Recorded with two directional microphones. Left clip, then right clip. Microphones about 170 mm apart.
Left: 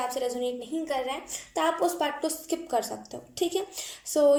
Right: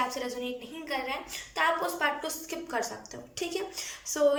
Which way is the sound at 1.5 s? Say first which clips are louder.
Left 2 dB; 40° left (ahead or behind).